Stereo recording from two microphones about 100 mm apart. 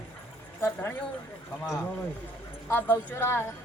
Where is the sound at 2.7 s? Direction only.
15° left (ahead or behind).